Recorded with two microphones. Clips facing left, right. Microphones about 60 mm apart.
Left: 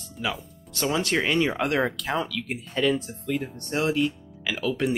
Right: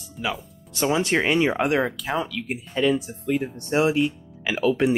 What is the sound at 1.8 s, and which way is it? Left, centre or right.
Speech, centre.